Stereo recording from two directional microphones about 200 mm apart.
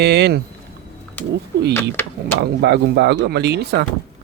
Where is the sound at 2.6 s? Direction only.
55° right (ahead or behind).